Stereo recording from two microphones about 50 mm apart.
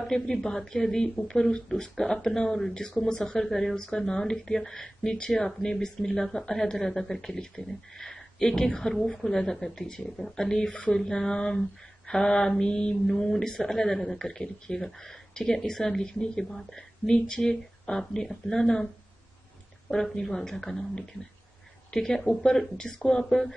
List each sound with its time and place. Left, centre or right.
0.0 s speech: centre
10.7 s speech: left
11.0 s speech: centre
19.9 s speech: centre